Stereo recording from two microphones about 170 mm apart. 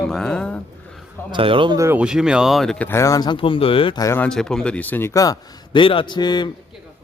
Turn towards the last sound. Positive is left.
turn(degrees=25)  # may be behind; listen again after turning